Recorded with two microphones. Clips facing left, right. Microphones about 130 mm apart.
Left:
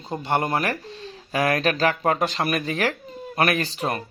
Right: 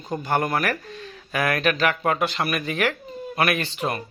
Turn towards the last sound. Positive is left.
turn(degrees=35)  # may be behind; listen again after turning